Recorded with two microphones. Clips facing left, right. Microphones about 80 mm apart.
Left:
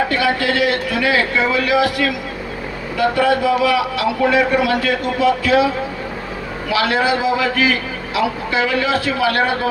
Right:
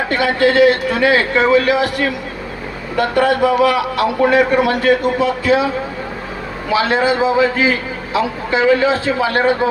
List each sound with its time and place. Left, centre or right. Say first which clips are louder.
0.1 s a man's voice: right 3 dB; right
3.0 s a man's voice: right 2 dB; right
6.7 s a man's voice: right 2 dB; right